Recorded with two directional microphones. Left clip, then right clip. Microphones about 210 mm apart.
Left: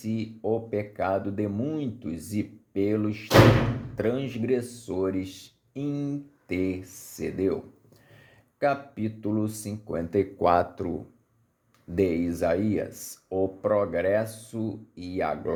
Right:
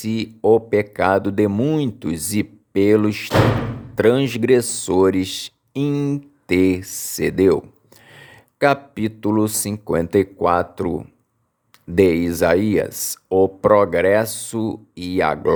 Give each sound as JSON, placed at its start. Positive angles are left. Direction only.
{"t": 0.0, "sound": "speech", "side_deg": -45}
{"t": 10.3, "sound": "speech", "side_deg": -20}
{"t": 11.9, "sound": "speech", "side_deg": -40}